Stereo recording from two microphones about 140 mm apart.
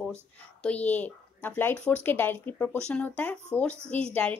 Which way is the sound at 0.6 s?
10° left (ahead or behind).